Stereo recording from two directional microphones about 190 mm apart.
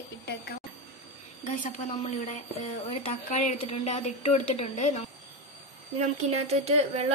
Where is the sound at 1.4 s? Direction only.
30° left (ahead or behind).